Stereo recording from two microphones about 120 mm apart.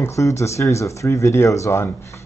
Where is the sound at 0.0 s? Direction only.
25° left (ahead or behind).